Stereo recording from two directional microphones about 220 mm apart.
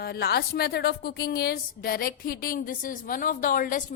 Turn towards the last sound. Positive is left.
turn(degrees=40)  # may be behind; listen again after turning